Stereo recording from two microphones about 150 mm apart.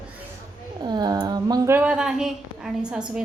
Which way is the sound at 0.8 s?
30° right (ahead or behind).